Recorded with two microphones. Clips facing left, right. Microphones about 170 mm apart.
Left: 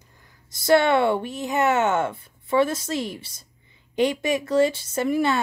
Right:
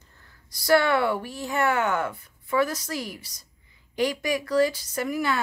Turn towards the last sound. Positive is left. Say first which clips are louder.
# left 5 dB
turn(degrees=25)  # may be behind; listen again after turning